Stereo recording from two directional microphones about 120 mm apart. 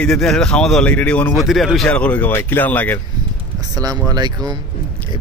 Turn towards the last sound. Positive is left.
turn(degrees=-35)  # may be behind; listen again after turning